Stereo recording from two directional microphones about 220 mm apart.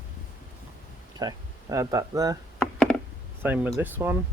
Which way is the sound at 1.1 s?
15° right (ahead or behind).